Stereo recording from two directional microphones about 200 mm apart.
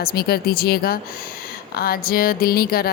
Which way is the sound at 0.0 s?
50° left (ahead or behind).